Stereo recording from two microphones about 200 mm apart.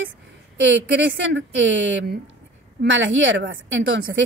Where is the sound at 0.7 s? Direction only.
60° right (ahead or behind).